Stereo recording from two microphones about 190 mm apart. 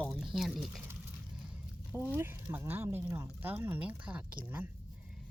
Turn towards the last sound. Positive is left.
turn(degrees=-10)  # may be behind; listen again after turning